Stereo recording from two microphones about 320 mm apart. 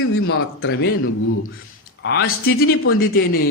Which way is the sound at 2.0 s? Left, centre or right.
Left.